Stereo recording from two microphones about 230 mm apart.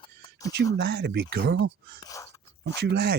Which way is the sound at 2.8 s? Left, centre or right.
Right.